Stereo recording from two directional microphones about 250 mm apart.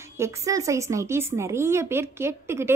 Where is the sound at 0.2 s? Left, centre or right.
Centre.